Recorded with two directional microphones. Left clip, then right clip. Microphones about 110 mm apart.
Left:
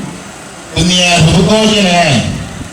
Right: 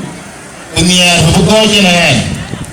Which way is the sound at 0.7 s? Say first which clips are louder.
Right 1 dB; 20° right (ahead or behind).